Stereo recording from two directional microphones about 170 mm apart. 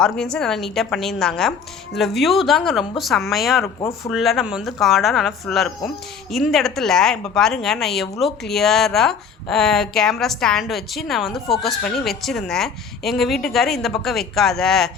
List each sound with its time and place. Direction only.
0.0 s a woman's voice: 5° left (ahead or behind)
3.8 s speech: 20° left (ahead or behind)
4.1 s a woman's voice: centre (ahead or behind)